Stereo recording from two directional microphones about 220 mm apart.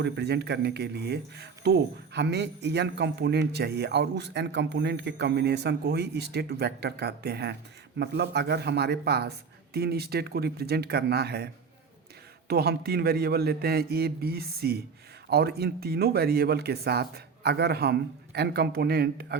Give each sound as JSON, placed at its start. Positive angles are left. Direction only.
{"t": 0.0, "sound": "speech", "side_deg": -50}
{"t": 12.5, "sound": "speech", "side_deg": -45}